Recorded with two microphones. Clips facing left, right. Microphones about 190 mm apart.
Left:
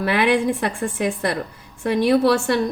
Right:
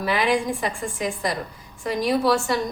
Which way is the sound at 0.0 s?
65° left (ahead or behind).